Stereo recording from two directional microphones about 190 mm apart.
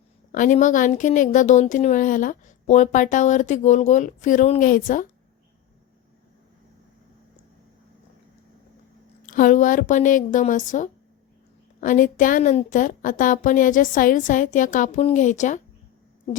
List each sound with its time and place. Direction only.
0.3 s a woman's voice: 45° left (ahead or behind)
9.2 s a woman's voice: 45° left (ahead or behind)